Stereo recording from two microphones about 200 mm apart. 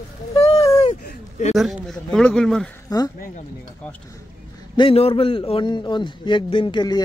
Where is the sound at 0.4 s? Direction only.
30° left (ahead or behind).